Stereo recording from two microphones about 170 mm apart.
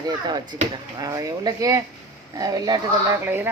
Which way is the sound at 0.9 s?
20° right (ahead or behind).